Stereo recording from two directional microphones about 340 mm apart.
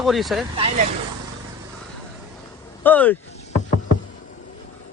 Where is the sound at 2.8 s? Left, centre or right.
Centre.